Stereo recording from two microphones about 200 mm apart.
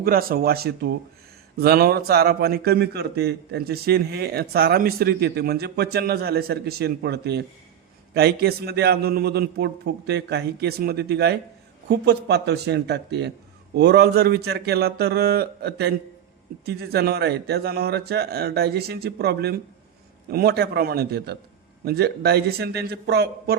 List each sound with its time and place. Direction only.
0.0 s a man's voice: 50° right (ahead or behind)